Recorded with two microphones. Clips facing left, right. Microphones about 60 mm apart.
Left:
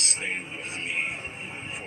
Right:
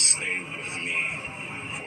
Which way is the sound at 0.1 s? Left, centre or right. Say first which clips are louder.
Right 3 dB; right.